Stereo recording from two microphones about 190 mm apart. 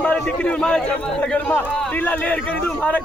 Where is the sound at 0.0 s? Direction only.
5° left (ahead or behind).